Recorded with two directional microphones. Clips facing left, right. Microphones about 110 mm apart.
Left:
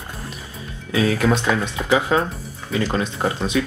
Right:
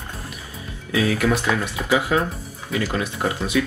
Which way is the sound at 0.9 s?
30° left (ahead or behind).